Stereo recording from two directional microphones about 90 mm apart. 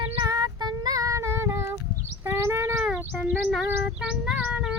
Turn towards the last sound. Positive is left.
turn(degrees=-15)  # may be behind; listen again after turning